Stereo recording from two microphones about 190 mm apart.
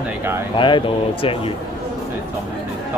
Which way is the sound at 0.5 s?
25° left (ahead or behind).